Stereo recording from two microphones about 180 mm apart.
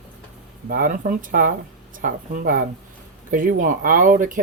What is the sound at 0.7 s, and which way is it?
Speech, 50° right (ahead or behind).